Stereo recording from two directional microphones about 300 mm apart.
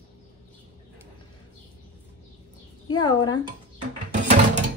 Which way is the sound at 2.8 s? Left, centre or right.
Centre.